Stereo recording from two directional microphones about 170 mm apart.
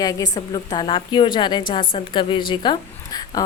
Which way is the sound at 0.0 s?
20° left (ahead or behind).